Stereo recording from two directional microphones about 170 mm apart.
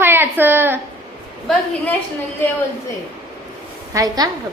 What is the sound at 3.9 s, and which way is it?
Speech, 20° right (ahead or behind).